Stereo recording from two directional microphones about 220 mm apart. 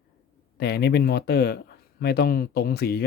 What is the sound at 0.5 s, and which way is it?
Speech, 50° left (ahead or behind).